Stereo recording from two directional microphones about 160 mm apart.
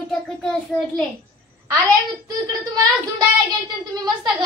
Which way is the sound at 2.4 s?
25° right (ahead or behind).